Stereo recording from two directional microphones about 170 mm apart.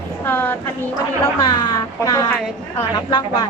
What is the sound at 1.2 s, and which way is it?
A woman's voice, 20° left (ahead or behind).